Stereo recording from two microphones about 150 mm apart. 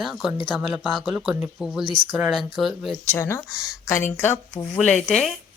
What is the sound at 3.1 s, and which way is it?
Speech, 15° left (ahead or behind).